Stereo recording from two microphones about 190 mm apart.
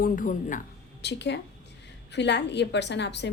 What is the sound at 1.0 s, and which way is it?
A woman's voice, 65° left (ahead or behind).